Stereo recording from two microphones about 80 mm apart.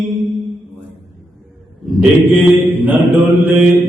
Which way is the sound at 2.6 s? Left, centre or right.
Right.